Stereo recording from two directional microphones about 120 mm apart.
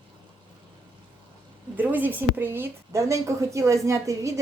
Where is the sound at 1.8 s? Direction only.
15° right (ahead or behind).